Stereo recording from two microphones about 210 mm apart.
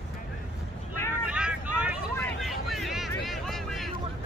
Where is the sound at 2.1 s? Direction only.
Centre (ahead or behind).